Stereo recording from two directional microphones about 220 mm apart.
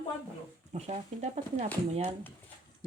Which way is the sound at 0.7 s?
30° right (ahead or behind).